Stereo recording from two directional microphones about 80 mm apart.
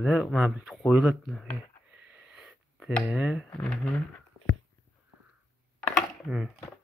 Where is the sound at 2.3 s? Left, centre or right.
Centre.